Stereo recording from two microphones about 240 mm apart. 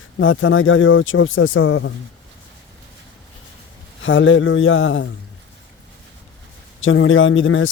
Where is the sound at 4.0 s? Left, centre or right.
Left.